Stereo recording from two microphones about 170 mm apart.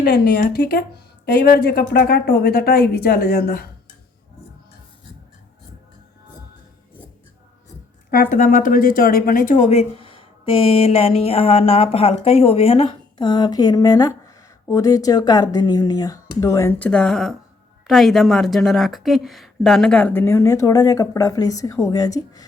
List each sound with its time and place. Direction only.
0.0 s speech: 70° left (ahead or behind)
8.1 s a woman's voice: 55° left (ahead or behind); by 22.4 s 20° left (ahead or behind)